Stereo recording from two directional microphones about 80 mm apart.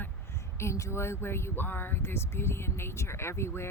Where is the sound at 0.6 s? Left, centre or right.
Left.